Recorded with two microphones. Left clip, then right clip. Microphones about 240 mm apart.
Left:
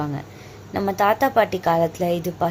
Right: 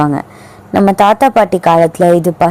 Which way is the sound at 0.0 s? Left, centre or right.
Right.